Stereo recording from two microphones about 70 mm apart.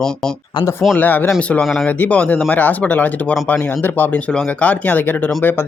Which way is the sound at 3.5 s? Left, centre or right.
Left.